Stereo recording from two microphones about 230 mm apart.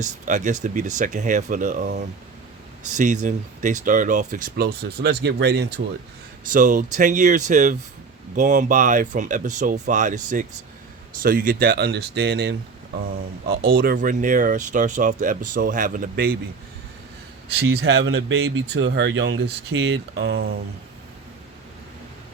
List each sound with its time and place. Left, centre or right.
0.0 s speech: right
6.4 s speech: right
17.6 s speech: right